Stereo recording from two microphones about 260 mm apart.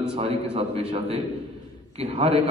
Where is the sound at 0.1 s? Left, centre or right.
Right.